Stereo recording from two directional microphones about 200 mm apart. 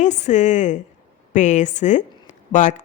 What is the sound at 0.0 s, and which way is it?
A woman's voice, 35° left (ahead or behind).